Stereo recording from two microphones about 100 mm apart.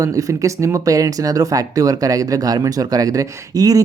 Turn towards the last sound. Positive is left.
turn(degrees=-40)  # may be behind; listen again after turning